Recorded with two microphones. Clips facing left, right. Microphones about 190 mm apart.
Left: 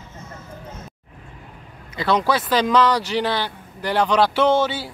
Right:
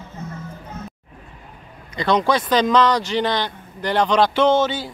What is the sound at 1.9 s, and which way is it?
Speech, 5° left (ahead or behind).